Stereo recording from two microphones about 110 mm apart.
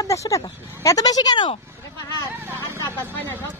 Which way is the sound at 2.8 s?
20° left (ahead or behind).